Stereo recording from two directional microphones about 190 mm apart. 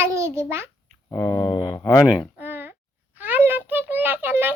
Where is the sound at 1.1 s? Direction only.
15° left (ahead or behind).